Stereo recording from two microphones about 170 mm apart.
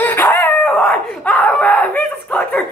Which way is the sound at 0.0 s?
10° left (ahead or behind).